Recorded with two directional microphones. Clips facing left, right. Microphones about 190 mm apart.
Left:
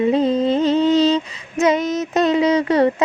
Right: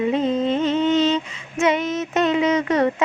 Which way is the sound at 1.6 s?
40° left (ahead or behind).